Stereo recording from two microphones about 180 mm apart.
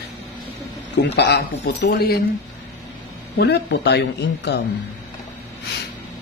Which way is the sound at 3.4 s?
70° left (ahead or behind).